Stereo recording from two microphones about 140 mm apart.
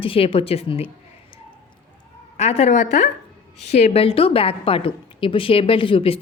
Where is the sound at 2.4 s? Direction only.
50° left (ahead or behind).